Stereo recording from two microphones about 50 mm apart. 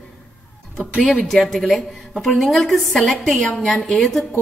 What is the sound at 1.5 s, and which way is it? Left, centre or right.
A woman's voice, centre.